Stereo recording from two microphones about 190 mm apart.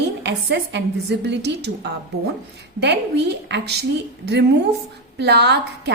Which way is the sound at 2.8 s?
60° right (ahead or behind).